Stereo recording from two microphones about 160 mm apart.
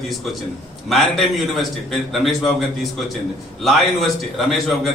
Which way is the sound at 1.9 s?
Centre (ahead or behind).